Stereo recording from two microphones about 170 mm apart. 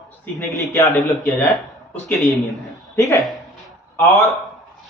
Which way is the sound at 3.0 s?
20° left (ahead or behind).